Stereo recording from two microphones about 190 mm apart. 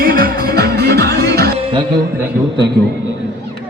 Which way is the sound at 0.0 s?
50° right (ahead or behind).